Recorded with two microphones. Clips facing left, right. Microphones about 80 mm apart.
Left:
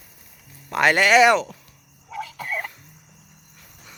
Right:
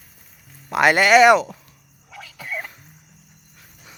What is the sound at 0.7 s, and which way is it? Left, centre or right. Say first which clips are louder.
Speech: right 2 dB; centre.